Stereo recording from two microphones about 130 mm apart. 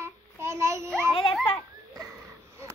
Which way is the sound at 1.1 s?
40° left (ahead or behind).